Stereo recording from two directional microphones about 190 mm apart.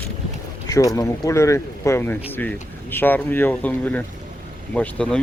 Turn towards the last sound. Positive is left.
turn(degrees=5)  # may be behind; listen again after turning